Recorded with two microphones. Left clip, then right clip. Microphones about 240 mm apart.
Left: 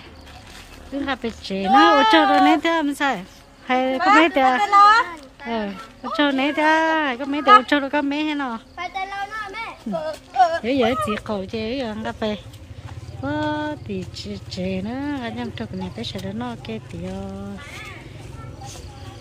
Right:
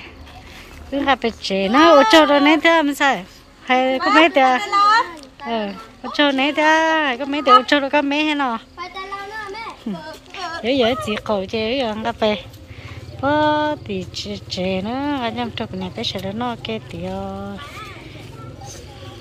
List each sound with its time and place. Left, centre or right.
0.9 s speech: centre
4.7 s a sound: left
5.4 s speech: centre
10.3 s speech: centre